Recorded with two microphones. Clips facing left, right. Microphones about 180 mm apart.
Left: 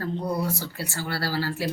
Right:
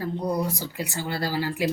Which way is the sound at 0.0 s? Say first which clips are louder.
Right 1 dB; 15° right (ahead or behind).